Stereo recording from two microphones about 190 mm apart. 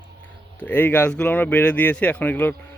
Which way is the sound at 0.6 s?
10° left (ahead or behind).